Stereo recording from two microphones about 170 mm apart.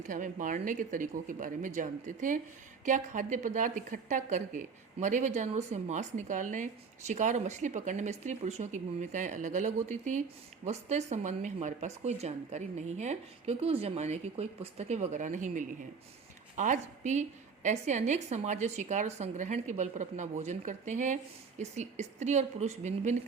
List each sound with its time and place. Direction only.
0.1 s a woman's voice: 50° right (ahead or behind)